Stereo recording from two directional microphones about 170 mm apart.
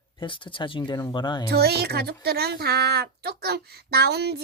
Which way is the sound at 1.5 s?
70° right (ahead or behind).